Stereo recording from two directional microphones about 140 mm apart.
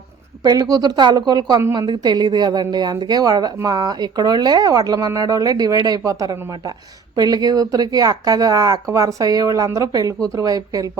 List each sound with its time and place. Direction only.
0.4 s speech: 30° right (ahead or behind)